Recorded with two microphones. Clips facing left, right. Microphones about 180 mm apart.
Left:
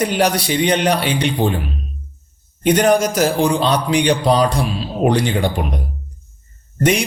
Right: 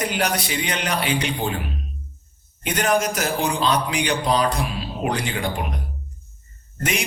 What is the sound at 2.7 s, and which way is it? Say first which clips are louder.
A man's voice: left 7 dB; 35° left (ahead or behind).